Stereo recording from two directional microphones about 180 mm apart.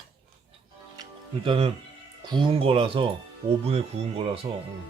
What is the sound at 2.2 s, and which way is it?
Speech, 25° right (ahead or behind).